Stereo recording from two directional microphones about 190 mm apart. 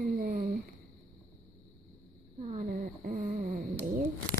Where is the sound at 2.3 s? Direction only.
40° right (ahead or behind).